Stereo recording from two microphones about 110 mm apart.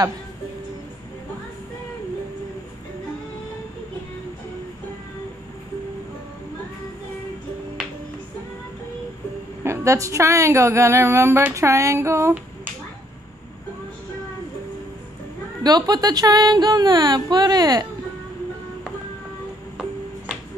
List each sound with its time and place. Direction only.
9.6 s a woman's voice: 25° right (ahead or behind)
15.6 s a woman's voice: 40° right (ahead or behind)